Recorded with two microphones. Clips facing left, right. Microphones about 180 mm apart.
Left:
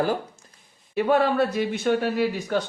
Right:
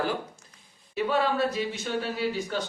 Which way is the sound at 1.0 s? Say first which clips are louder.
Left 5 dB; 55° left (ahead or behind).